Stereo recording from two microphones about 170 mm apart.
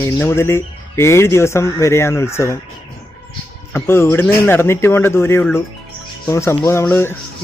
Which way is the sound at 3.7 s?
15° left (ahead or behind).